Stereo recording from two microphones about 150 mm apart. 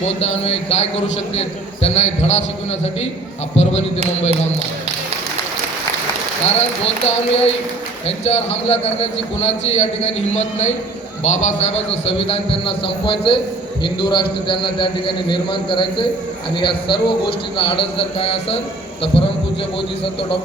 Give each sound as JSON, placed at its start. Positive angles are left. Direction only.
{"t": 0.0, "sound": "a man's voice", "side_deg": 45}
{"t": 3.5, "sound": "a man's voice", "side_deg": 45}
{"t": 6.6, "sound": "a man's voice", "side_deg": 45}